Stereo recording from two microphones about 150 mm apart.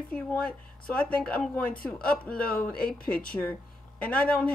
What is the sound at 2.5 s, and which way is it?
Speech, 80° left.